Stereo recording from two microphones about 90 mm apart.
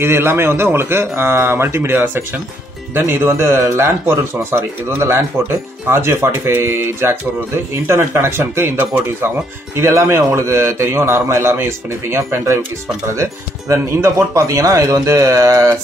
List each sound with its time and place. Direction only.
0.0 s a man's voice: 25° right (ahead or behind)